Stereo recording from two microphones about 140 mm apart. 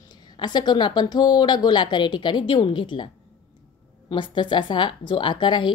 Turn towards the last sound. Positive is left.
turn(degrees=35)  # may be behind; listen again after turning